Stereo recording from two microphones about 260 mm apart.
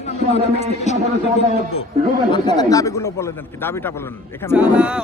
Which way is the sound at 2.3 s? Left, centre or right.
Centre.